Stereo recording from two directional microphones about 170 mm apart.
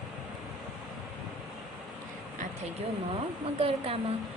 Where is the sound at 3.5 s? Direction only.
35° right (ahead or behind).